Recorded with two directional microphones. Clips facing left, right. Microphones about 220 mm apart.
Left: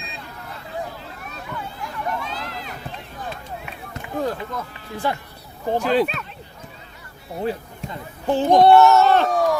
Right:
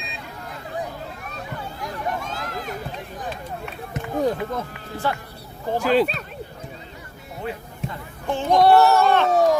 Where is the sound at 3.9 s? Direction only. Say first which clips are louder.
Right 3 dB; 20° right (ahead or behind).